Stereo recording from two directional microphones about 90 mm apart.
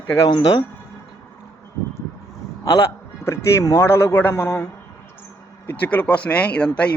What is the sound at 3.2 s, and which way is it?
A man's voice, 30° left (ahead or behind).